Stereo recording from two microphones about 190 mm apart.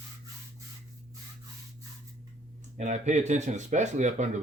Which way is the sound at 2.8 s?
40° right (ahead or behind).